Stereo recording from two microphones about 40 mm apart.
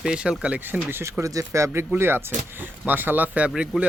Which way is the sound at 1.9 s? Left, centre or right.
Right.